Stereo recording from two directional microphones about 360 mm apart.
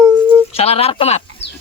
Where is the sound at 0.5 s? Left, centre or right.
Centre.